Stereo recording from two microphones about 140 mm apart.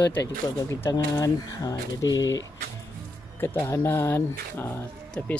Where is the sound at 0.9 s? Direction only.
25° left (ahead or behind).